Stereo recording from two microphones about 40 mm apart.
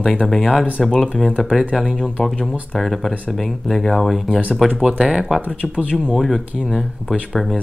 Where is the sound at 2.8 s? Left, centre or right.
Centre.